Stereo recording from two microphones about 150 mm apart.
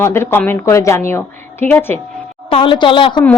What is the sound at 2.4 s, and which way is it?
Speech, 35° left (ahead or behind).